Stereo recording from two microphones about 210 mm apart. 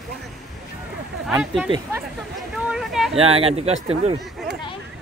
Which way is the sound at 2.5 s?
Centre (ahead or behind).